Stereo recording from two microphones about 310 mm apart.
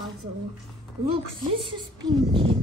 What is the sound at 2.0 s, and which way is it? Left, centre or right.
Speech, centre.